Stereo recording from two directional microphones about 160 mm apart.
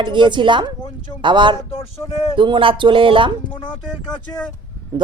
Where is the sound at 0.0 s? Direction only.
30° right (ahead or behind).